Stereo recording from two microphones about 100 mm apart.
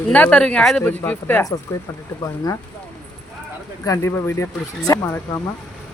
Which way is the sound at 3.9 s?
25° left (ahead or behind).